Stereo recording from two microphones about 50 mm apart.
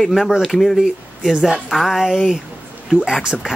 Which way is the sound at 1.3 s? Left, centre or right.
Centre.